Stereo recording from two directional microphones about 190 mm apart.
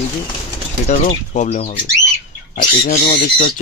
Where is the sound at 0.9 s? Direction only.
35° left (ahead or behind).